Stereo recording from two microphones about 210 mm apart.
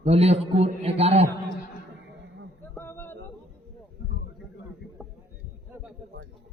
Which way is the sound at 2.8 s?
10° left (ahead or behind).